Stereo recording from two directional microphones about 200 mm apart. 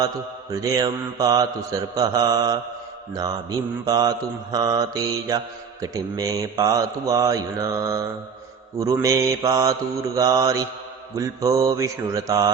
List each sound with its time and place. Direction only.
0.5 s mantra: 15° right (ahead or behind)
3.8 s mantra: 20° right (ahead or behind)